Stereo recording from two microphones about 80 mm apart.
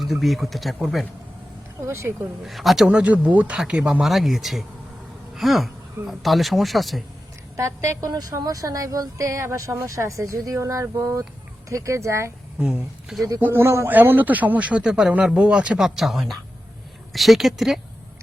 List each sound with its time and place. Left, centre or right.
0.0 s speech: centre
1.8 s a woman's voice: right
2.4 s speech: centre
7.5 s a woman's voice: right
12.5 s speech: centre
13.4 s speech: right; by 15.9 s centre
16.0 s speech: centre